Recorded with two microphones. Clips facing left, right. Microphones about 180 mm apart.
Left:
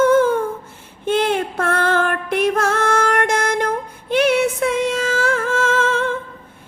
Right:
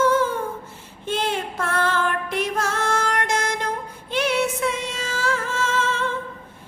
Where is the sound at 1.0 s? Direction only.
60° left (ahead or behind).